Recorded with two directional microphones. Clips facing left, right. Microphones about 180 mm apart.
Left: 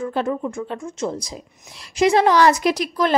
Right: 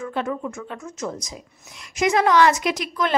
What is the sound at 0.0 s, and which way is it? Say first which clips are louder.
A woman's voice: left 4 dB; 35° left (ahead or behind).